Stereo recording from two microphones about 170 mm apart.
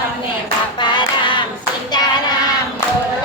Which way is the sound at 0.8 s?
25° left (ahead or behind).